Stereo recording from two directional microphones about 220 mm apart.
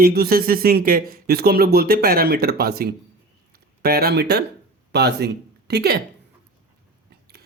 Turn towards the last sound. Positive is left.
turn(degrees=-45)  # may be behind; listen again after turning